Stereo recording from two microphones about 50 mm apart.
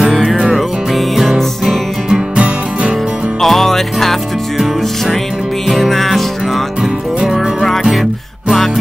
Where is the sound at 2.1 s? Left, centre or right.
Right.